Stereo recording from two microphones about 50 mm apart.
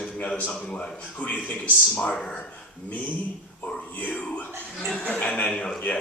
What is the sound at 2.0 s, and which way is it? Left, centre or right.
Speech, centre.